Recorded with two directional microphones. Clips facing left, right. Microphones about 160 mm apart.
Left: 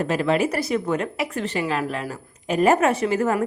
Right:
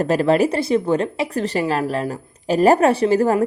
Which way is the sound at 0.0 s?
40° right (ahead or behind).